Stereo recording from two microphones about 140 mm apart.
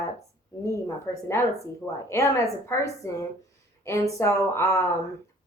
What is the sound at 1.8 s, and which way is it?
Speech, 20° left (ahead or behind).